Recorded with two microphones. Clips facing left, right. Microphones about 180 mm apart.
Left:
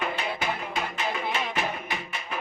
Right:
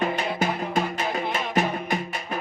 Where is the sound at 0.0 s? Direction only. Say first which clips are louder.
Right 5 dB; 45° right (ahead or behind).